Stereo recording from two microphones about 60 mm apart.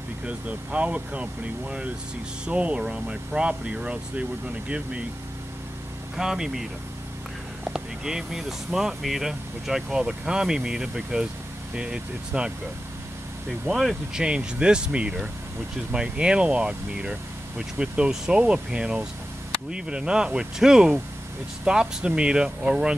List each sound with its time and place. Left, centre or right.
0.2 s speech: right
6.1 s speech: centre
7.7 s speech: centre
14.1 s speech: centre